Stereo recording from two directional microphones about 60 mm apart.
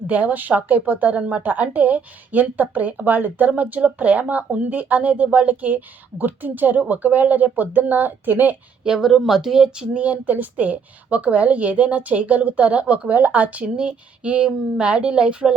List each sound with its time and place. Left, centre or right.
0.1 s a woman's voice: right
8.8 s a woman's voice: centre